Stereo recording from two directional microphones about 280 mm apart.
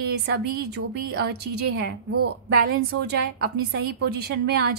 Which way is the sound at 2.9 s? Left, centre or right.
Right.